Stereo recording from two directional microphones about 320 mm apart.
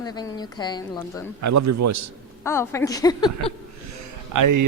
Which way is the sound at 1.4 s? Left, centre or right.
Right.